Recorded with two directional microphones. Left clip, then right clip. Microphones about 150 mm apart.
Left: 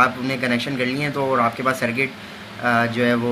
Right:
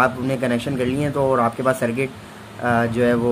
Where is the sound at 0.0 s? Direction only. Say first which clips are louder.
Even; 90° right.